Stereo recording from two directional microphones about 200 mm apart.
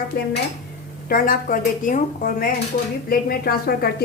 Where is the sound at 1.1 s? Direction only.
45° left (ahead or behind).